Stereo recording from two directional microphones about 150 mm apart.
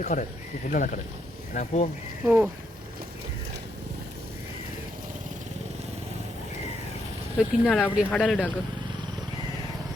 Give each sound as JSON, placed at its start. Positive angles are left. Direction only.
{"t": 0.0, "sound": "speech", "side_deg": 60}
{"t": 1.5, "sound": "speech", "side_deg": 45}
{"t": 2.2, "sound": "speech", "side_deg": -10}
{"t": 7.3, "sound": "speech", "side_deg": 0}